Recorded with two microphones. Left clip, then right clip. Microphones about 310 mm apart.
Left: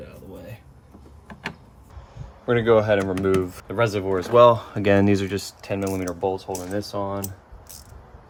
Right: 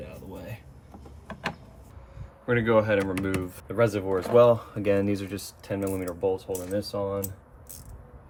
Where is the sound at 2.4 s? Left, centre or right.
Centre.